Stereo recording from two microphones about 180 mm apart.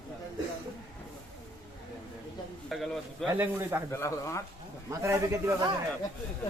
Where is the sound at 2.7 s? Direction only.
Centre (ahead or behind).